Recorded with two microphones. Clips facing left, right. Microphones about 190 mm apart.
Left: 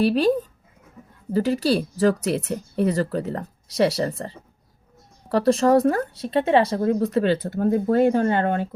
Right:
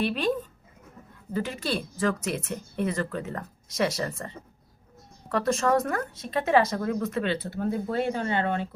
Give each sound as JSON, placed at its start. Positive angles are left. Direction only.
{"t": 0.0, "sound": "speech", "side_deg": 40}
{"t": 1.0, "sound": "a sound", "side_deg": 15}
{"t": 1.3, "sound": "speech", "side_deg": 40}